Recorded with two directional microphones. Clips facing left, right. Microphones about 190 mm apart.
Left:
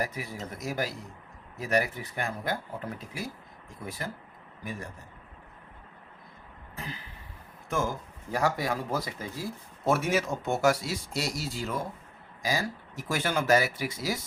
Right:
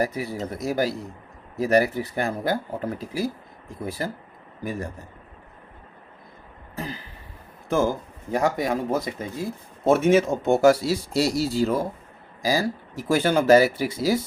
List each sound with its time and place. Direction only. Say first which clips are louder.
0.0 s speech: right 8 dB; 30° right (ahead or behind)
6.7 s a sound: right 8 dB; 35° right (ahead or behind)
7.7 s speech: right 8 dB; 30° right (ahead or behind)
8.3 s speech: right 5 dB; 20° right (ahead or behind)